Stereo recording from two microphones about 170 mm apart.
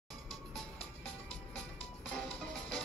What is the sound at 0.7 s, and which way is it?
Music, 35° left (ahead or behind).